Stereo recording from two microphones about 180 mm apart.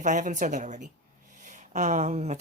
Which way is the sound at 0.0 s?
45° right (ahead or behind).